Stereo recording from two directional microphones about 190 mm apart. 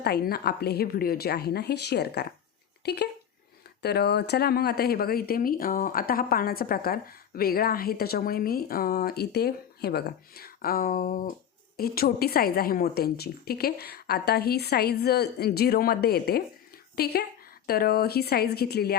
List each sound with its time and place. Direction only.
0.0 s a woman's voice: 55° left (ahead or behind)